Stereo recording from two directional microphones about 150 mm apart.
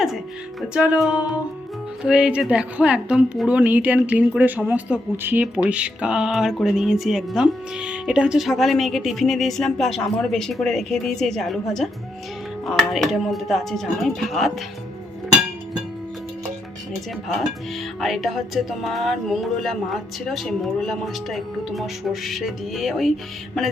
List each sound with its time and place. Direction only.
0.7 s a woman's voice: 5° right (ahead or behind)
18.0 s speech: centre (ahead or behind)